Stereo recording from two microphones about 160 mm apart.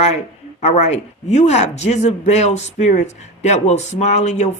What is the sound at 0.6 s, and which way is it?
Speech, 45° left (ahead or behind).